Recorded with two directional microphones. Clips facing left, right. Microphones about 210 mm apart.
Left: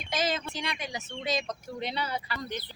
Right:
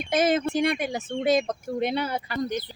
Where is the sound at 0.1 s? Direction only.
55° right (ahead or behind).